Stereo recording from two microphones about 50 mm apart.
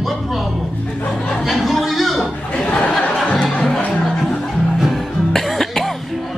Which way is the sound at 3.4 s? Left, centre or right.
Centre.